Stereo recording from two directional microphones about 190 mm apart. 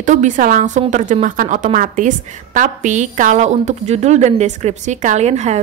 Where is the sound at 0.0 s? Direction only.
40° right (ahead or behind).